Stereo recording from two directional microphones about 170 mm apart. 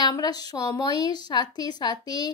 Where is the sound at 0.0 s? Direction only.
25° left (ahead or behind).